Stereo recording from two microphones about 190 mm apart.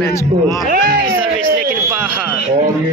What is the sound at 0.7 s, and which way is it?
Speech, 50° right (ahead or behind).